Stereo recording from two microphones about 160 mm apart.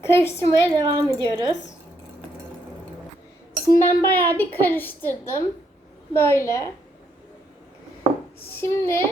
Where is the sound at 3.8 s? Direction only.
10° left (ahead or behind).